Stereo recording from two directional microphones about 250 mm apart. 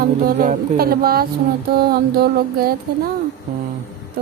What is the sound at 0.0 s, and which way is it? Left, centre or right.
A woman's voice, right.